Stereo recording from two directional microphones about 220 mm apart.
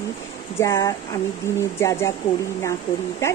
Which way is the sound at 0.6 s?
15° left (ahead or behind).